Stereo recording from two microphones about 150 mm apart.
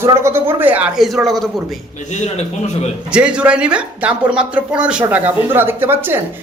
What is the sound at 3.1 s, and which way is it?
Speech, 5° right (ahead or behind).